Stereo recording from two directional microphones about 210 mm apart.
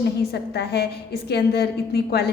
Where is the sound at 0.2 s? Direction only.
50° left (ahead or behind).